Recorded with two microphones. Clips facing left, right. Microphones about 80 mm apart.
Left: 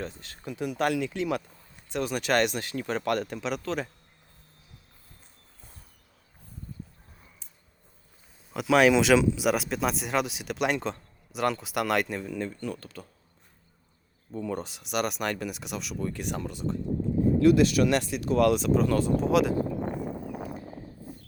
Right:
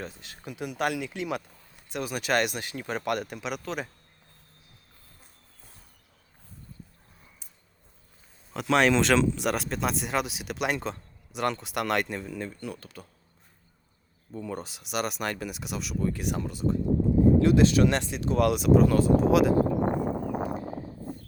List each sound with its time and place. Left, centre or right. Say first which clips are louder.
0.0 s speech: left 2 dB; centre
1.9 s speech: left 1 dB; centre
2.6 s speech: left 2 dB; centre
8.5 s speech: left 2 dB; centre
14.3 s speech: left 3 dB; centre
17.4 s speech: even; right; by 19.5 s centre
20.1 s a sound: right 6 dB; right